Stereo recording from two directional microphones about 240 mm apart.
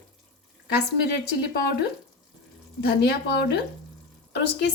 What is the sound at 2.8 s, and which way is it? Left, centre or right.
A woman's voice, left.